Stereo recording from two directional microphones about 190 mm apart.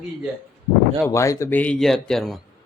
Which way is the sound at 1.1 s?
15° left (ahead or behind).